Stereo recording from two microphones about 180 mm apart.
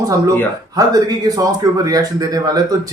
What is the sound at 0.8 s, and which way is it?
Speech, 20° right (ahead or behind).